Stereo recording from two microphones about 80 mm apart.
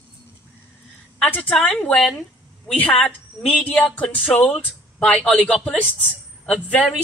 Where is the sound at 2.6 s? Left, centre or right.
Centre.